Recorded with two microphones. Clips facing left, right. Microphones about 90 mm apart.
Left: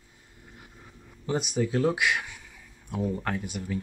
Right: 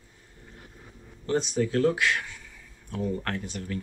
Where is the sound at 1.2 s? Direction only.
10° left (ahead or behind).